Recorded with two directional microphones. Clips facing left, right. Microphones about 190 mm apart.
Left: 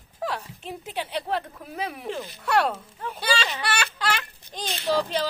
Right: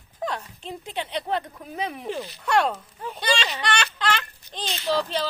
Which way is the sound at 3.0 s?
5° left (ahead or behind).